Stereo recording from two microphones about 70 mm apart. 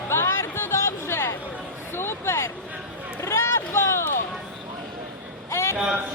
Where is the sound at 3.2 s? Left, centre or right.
Left.